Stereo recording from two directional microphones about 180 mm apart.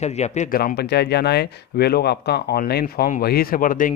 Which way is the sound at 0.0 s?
40° left (ahead or behind).